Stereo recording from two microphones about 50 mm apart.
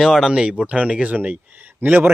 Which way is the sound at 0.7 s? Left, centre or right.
Right.